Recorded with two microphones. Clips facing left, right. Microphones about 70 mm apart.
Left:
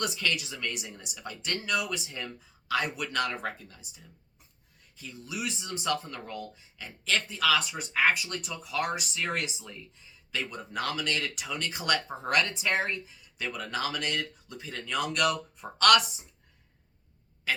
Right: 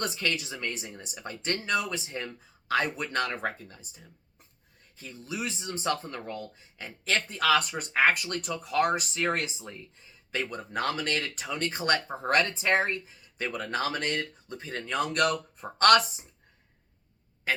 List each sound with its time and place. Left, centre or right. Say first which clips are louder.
0.0 s speech: even; right